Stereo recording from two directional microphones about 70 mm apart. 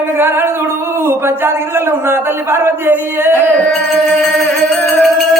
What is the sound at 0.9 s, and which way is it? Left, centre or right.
Speech, right.